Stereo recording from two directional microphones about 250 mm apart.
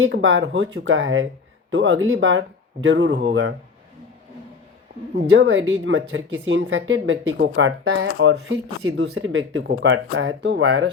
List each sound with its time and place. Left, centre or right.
0.0 s speech: right
5.3 s speech: right